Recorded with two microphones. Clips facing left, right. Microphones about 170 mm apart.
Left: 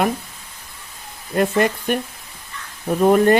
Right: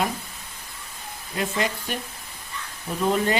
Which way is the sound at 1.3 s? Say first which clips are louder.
Left 9 dB; 55° left (ahead or behind).